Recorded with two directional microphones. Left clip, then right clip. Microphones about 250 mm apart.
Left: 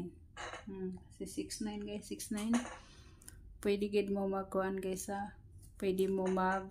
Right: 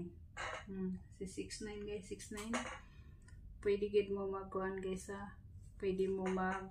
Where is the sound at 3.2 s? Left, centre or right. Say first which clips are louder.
Left 2 dB; left.